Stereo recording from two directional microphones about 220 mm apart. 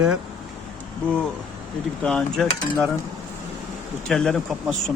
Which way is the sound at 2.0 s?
Centre (ahead or behind).